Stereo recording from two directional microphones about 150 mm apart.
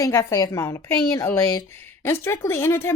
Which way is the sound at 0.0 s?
20° left (ahead or behind).